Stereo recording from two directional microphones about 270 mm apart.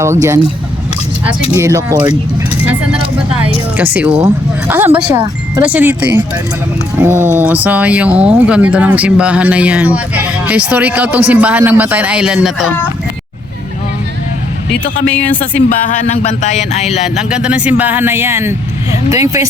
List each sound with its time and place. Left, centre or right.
0.0 s speech: centre
1.5 s speech: centre
3.8 s speech: centre
15.1 s speech: centre
15.8 s music: left
17.2 s speech: centre